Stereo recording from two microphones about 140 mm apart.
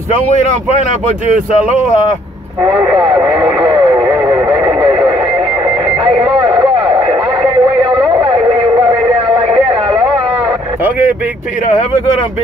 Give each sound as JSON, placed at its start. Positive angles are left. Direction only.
{"t": 2.6, "sound": "speech", "side_deg": -20}
{"t": 3.3, "sound": "speech", "side_deg": -10}
{"t": 3.7, "sound": "radio", "side_deg": -30}
{"t": 4.8, "sound": "radio", "side_deg": -30}
{"t": 6.1, "sound": "a sound", "side_deg": -30}